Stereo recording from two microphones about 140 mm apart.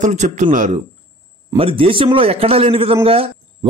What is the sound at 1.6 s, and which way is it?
A man's voice, 40° right (ahead or behind).